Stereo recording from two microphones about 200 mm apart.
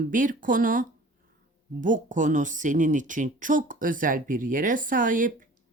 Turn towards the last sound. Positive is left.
turn(degrees=-40)  # may be behind; listen again after turning